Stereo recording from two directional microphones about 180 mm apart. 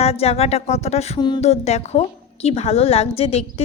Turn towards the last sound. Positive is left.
turn(degrees=35)  # may be behind; listen again after turning